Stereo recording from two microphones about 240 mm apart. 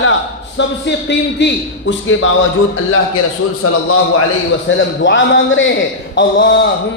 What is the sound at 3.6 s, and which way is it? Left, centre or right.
Speech, left.